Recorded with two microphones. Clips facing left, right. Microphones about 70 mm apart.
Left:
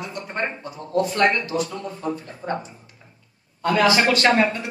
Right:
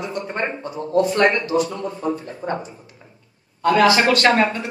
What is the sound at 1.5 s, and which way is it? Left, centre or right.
Speech, right.